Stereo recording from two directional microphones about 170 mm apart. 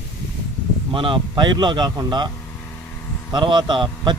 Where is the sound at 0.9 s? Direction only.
30° right (ahead or behind).